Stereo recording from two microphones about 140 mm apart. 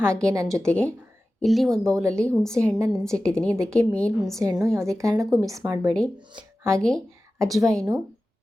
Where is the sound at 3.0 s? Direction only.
5° left (ahead or behind).